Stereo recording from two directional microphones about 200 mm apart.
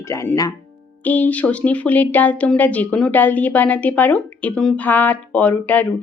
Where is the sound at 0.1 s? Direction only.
15° left (ahead or behind).